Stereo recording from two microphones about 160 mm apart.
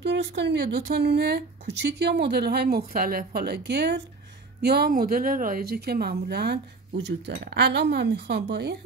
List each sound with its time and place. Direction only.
0.0 s speech: 90° right